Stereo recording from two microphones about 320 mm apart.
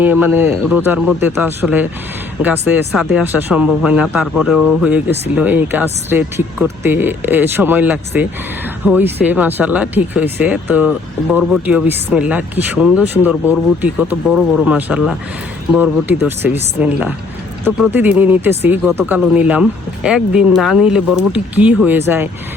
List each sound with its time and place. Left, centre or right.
0.0 s speech: centre